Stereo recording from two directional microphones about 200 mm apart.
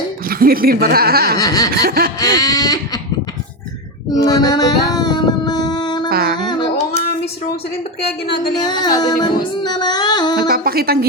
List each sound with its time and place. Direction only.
0.3 s speech: 45° right (ahead or behind)
1.4 s a sound: 20° left (ahead or behind)
1.8 s speech: 50° right (ahead or behind)
2.1 s singing: 20° left (ahead or behind)
4.3 s a sound: 20° left (ahead or behind)
6.1 s a sound: 50° right (ahead or behind)
6.5 s child singing: 20° left (ahead or behind)
8.5 s singing: 20° left (ahead or behind)
10.3 s speech: 50° right (ahead or behind)